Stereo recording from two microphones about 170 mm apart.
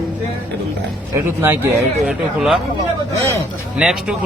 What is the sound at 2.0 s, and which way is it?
Speech, 5° right (ahead or behind).